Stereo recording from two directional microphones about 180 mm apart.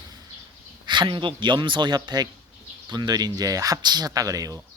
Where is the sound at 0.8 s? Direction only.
25° right (ahead or behind).